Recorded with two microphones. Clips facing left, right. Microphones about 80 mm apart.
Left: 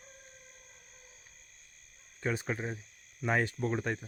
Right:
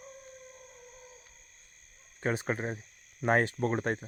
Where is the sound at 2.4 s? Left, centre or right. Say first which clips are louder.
Right 3 dB; right.